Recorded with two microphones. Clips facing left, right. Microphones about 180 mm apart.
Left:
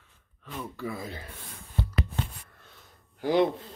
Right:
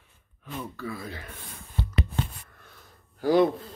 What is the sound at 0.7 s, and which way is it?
Speech, 20° left (ahead or behind).